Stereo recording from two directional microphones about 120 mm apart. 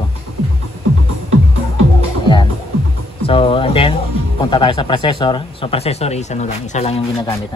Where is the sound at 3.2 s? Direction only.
50° left (ahead or behind).